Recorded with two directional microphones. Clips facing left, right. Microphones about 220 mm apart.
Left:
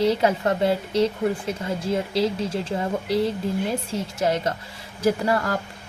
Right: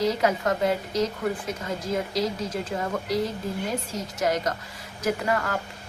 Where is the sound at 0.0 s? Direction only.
30° left (ahead or behind).